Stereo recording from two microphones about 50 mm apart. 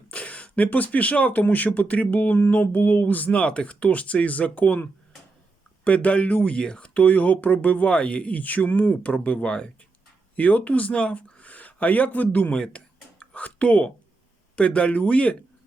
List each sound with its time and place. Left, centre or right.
0.1 s speech: left
3.4 s speech: left
12.5 s a sound: centre
14.5 s speech: left